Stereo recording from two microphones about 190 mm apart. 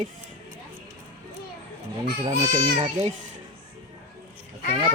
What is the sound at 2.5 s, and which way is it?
Speech, 30° right (ahead or behind).